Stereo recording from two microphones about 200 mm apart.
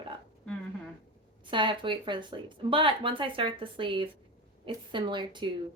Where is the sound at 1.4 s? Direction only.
25° right (ahead or behind).